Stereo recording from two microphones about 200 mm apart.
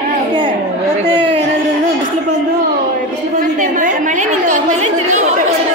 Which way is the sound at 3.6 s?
40° right (ahead or behind).